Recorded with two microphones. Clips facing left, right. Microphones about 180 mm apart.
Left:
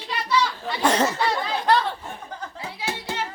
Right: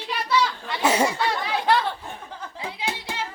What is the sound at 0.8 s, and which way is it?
Speech, 10° right (ahead or behind).